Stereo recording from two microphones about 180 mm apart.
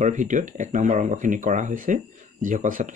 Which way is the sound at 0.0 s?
45° right (ahead or behind).